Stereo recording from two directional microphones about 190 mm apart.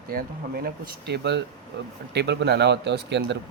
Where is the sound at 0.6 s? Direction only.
55° right (ahead or behind).